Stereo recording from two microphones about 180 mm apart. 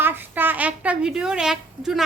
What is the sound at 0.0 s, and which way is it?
A woman's voice, 10° right (ahead or behind).